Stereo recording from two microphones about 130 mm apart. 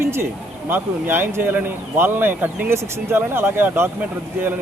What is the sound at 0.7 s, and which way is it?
Speech, 15° right (ahead or behind).